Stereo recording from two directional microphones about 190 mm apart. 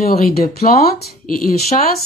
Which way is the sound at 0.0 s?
55° left (ahead or behind).